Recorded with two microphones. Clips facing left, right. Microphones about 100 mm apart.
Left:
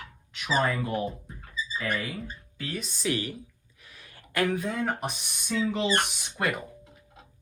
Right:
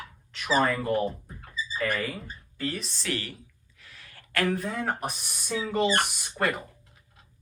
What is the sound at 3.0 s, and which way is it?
Speech, 15° left (ahead or behind).